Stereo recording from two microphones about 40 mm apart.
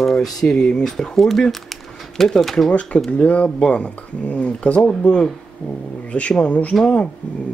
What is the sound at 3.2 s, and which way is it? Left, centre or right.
Speech, left.